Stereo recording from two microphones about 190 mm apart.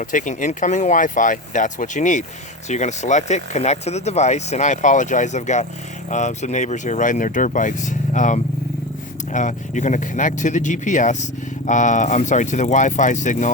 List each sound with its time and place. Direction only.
0.0 s speech: 45° left (ahead or behind)